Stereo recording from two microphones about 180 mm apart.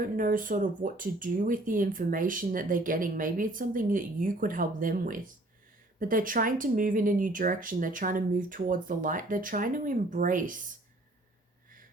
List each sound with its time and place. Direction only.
0.0 s speech: 50° right (ahead or behind)